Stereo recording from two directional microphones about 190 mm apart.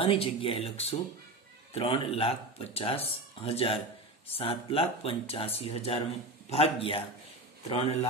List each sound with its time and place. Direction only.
0.0 s speech: 30° left (ahead or behind)